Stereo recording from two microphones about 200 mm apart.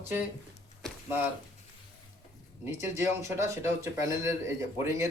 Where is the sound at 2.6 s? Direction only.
15° right (ahead or behind).